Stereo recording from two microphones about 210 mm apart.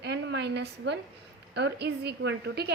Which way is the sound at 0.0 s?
55° right (ahead or behind).